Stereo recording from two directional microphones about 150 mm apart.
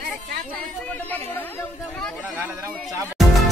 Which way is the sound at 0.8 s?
10° left (ahead or behind).